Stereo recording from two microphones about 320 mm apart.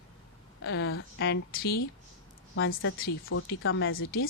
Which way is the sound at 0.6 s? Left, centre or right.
Left.